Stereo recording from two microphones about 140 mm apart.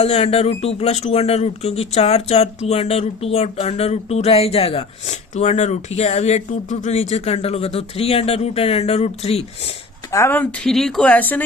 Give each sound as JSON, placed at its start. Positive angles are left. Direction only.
{"t": 0.0, "sound": "speech", "side_deg": 45}
{"t": 10.1, "sound": "speech", "side_deg": 20}